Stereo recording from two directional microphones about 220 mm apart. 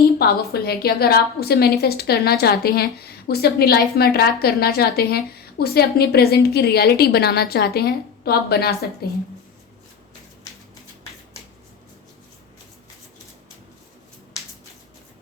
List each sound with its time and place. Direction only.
0.0 s a woman's voice: 45° left (ahead or behind)